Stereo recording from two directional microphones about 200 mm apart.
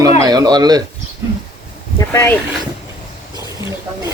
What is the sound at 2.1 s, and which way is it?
Speech, 10° left (ahead or behind).